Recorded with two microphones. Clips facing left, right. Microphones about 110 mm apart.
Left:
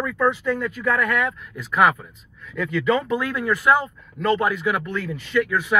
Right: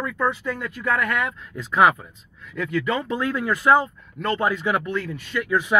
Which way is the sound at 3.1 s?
20° right (ahead or behind).